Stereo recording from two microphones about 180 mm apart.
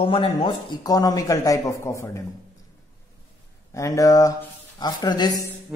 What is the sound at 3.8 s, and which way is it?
A man's voice, 20° left (ahead or behind).